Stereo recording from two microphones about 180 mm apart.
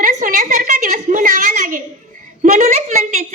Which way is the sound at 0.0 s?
45° right (ahead or behind).